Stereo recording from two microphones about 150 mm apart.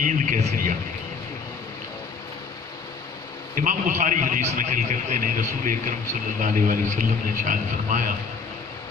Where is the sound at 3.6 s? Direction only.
60° right (ahead or behind).